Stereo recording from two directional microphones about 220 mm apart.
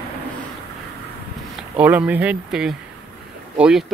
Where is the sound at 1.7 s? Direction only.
5° right (ahead or behind).